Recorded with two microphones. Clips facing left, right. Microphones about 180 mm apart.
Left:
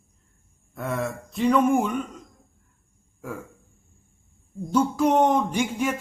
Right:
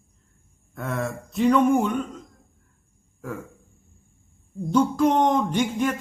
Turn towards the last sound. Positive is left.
turn(degrees=10)  # may be behind; listen again after turning